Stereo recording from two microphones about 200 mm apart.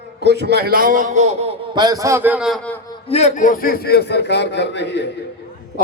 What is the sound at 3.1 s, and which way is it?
A man's voice, 35° left (ahead or behind).